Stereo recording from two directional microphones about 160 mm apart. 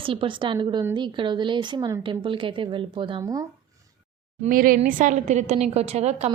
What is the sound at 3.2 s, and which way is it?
Speech, 20° right (ahead or behind).